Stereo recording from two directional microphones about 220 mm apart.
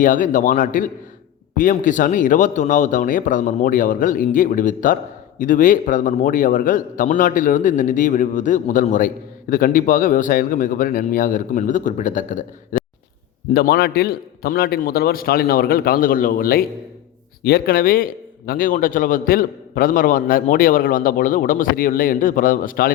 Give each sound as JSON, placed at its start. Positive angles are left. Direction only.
{"t": 0.0, "sound": "a man's voice", "side_deg": 35}